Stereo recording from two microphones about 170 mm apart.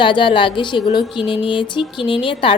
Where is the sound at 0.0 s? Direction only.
30° left (ahead or behind).